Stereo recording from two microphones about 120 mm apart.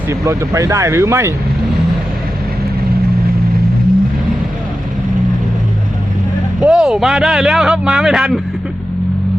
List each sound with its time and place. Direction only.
0.1 s speech: 25° right (ahead or behind)
6.6 s a man's voice: 5° right (ahead or behind)